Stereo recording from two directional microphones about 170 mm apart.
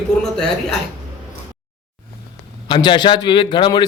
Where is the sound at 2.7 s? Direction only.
25° left (ahead or behind).